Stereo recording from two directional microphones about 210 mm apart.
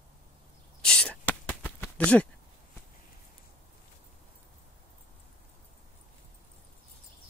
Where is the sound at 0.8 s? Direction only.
5° left (ahead or behind).